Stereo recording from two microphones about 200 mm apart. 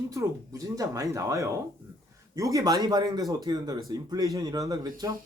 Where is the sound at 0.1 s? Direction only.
15° right (ahead or behind).